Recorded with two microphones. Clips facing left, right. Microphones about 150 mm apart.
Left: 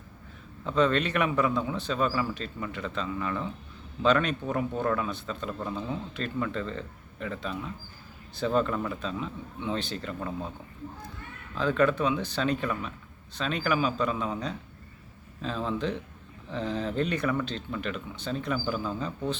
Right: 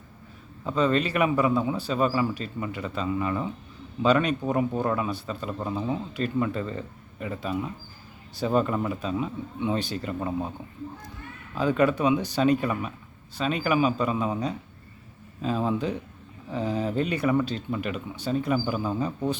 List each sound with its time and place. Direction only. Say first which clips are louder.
0.6 s speech: right 1 dB; 5° right (ahead or behind)
11.5 s speech: right 2 dB; 10° right (ahead or behind)